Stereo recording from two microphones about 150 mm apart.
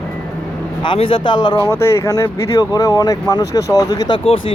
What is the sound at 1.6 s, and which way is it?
Speech, 15° left (ahead or behind).